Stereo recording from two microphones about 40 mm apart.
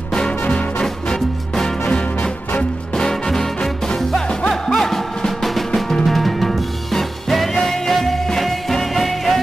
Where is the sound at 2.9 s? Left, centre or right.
Centre.